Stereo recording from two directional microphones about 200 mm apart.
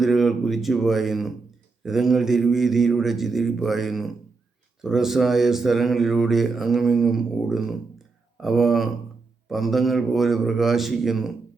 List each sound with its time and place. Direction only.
0.0 s speech: centre (ahead or behind)